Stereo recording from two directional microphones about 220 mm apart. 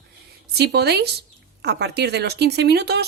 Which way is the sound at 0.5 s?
45° right (ahead or behind).